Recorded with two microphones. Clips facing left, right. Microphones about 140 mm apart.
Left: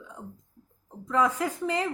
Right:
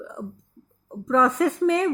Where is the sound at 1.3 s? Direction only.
65° right (ahead or behind).